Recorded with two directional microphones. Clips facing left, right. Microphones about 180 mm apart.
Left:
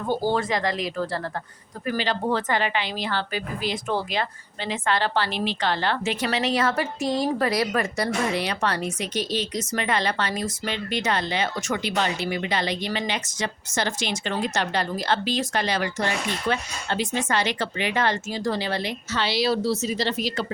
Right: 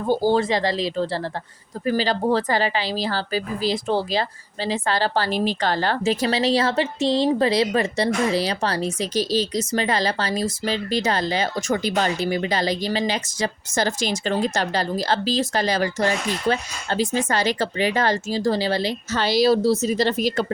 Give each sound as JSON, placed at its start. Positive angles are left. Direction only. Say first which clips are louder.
{"t": 0.1, "sound": "a woman's voice", "louder": "right 5 dB", "side_deg": -30}